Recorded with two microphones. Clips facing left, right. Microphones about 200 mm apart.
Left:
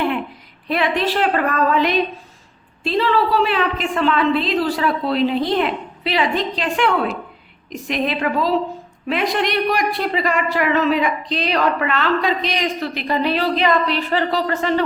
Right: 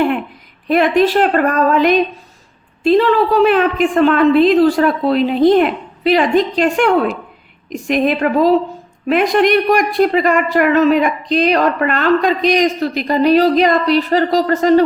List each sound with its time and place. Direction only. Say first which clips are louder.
0.7 s a woman's voice: right 7 dB; 45° right (ahead or behind)